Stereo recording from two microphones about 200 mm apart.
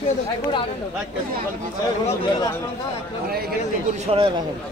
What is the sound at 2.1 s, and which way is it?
Speech, 20° left (ahead or behind).